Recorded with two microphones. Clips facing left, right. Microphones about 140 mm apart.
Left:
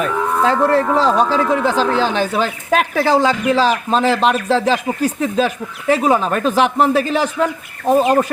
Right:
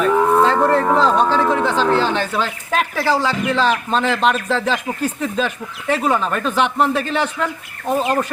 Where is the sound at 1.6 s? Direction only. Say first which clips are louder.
Left 1 dB; 10° left (ahead or behind).